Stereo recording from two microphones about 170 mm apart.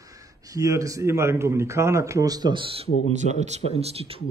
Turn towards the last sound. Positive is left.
turn(degrees=-35)  # may be behind; listen again after turning